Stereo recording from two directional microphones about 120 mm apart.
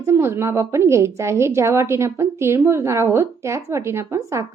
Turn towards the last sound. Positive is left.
turn(degrees=-25)  # may be behind; listen again after turning